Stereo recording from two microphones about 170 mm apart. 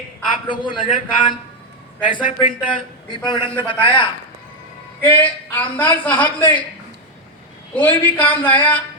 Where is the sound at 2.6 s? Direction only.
25° left (ahead or behind).